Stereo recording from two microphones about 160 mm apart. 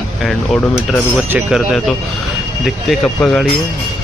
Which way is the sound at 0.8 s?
5° right (ahead or behind).